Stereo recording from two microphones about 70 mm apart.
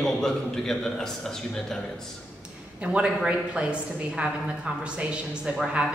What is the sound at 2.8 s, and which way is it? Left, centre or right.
A woman's voice, centre.